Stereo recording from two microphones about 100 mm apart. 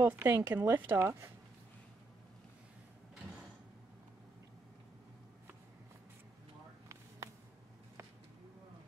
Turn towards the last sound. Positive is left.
turn(degrees=-30)  # may be behind; listen again after turning